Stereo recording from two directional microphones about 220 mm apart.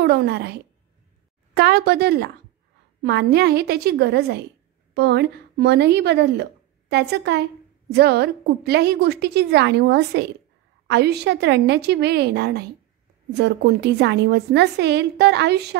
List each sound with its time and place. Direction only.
0.0 s a woman's voice: 50° right (ahead or behind)